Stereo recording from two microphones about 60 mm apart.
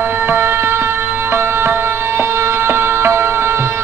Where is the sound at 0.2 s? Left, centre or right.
Right.